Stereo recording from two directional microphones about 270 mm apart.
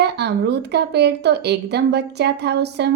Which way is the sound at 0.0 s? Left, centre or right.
Right.